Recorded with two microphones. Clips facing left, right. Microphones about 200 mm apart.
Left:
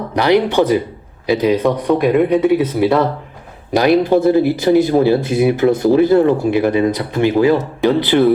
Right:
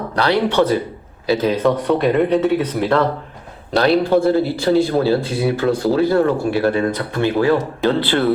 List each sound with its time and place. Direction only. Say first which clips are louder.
0.2 s speech: left 3 dB; 15° left (ahead or behind)
1.9 s speech: left 4 dB; centre (ahead or behind)